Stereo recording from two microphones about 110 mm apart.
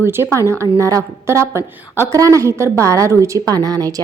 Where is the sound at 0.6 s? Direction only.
30° right (ahead or behind).